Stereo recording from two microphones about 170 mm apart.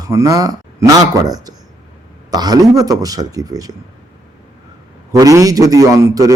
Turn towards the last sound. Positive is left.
turn(degrees=-20)  # may be behind; listen again after turning